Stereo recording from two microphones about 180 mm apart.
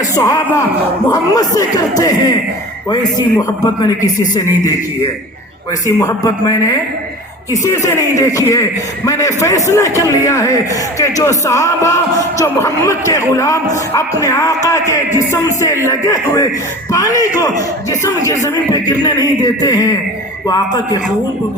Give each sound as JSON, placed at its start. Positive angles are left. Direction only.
{"t": 0.2, "sound": "a man's voice", "side_deg": 20}
{"t": 6.0, "sound": "a man's voice", "side_deg": 20}